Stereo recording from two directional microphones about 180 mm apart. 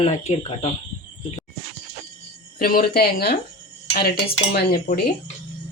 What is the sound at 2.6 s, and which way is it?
Dishes, 55° left (ahead or behind).